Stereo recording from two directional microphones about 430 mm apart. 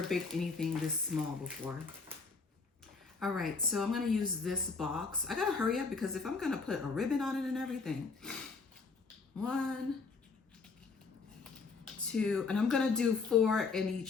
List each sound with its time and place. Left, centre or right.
0.1 s speech: centre
3.2 s speech: centre
9.4 s speech: centre
12.0 s speech: centre